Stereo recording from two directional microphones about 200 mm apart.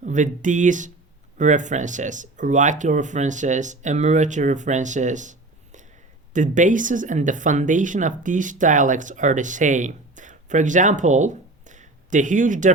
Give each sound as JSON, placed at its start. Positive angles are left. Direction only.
{"t": 0.0, "sound": "speech", "side_deg": -40}